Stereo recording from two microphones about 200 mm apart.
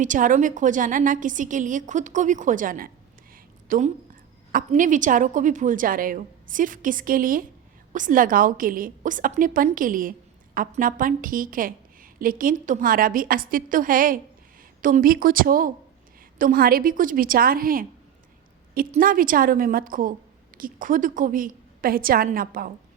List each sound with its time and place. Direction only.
0.0 s a woman's voice: 40° right (ahead or behind)
18.9 s a woman's voice: 45° right (ahead or behind)